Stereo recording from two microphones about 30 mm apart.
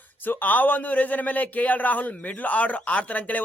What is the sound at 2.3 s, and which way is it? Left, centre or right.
A man's voice, left.